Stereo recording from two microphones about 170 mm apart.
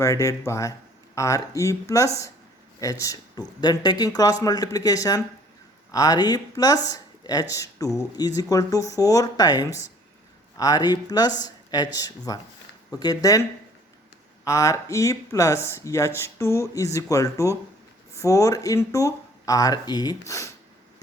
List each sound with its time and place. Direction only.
0.0 s speech: 20° left (ahead or behind)
14.4 s speech: 20° left (ahead or behind)